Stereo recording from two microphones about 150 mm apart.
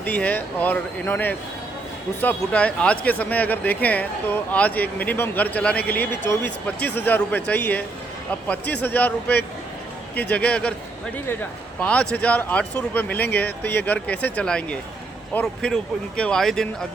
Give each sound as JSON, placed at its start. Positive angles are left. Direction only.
{"t": 0.0, "sound": "speech", "side_deg": 10}
{"t": 11.8, "sound": "speech", "side_deg": 10}